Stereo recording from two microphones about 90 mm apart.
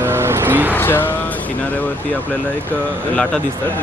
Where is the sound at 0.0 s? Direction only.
30° right (ahead or behind).